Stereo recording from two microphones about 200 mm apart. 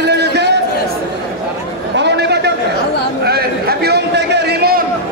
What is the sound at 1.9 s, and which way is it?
Chatter, 60° right (ahead or behind).